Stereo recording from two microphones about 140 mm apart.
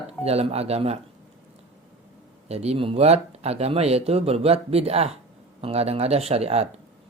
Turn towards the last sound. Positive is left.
turn(degrees=-45)  # may be behind; listen again after turning